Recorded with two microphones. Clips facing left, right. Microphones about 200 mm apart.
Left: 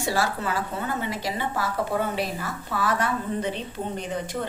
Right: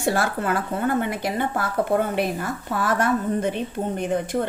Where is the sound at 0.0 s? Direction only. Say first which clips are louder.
Right 3 dB; 55° right (ahead or behind).